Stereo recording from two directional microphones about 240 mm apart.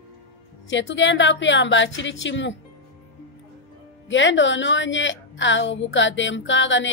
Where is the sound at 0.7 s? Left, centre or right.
Left.